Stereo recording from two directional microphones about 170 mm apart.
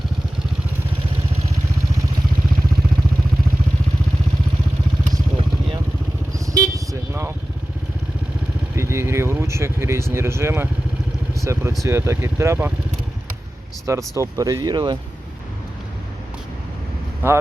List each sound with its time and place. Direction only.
6.4 s vehicle: 20° right (ahead or behind)
8.7 s vehicle: 15° right (ahead or behind)
11.3 s speech: 15° right (ahead or behind)
13.8 s speech: 20° right (ahead or behind)
17.2 s speech: 10° right (ahead or behind)